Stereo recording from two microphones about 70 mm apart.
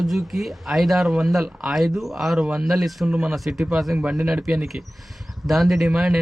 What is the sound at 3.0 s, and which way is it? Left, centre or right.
Speech, centre.